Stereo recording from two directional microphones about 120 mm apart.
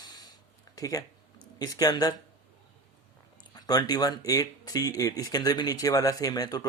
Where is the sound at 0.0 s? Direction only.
30° left (ahead or behind).